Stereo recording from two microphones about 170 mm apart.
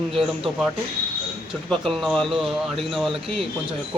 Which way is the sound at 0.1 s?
Centre (ahead or behind).